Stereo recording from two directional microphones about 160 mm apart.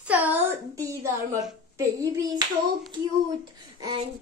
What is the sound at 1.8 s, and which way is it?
Speech, 20° right (ahead or behind).